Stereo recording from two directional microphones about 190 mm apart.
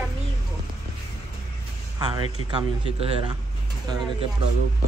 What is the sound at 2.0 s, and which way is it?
A man's voice, 20° right (ahead or behind).